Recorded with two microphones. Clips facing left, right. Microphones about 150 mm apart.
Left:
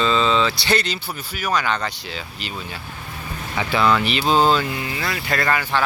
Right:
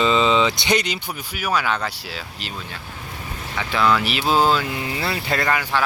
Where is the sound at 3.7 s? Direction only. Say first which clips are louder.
Left 1 dB; centre (ahead or behind).